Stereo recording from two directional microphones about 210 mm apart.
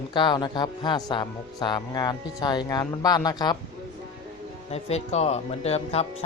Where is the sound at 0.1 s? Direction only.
20° left (ahead or behind).